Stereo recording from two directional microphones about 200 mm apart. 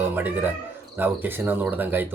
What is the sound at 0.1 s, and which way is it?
Speech, 10° right (ahead or behind).